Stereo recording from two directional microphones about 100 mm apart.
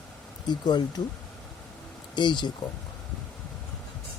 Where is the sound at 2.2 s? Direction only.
50° left (ahead or behind).